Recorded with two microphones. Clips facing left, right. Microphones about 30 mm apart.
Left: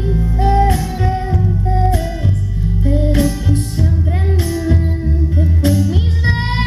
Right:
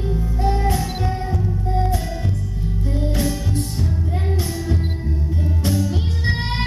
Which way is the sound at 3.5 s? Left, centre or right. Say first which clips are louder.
Left 5 dB; centre.